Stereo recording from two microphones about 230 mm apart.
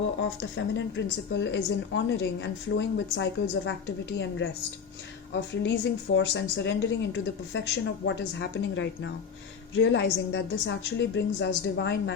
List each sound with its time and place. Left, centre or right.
0.2 s a woman's voice: left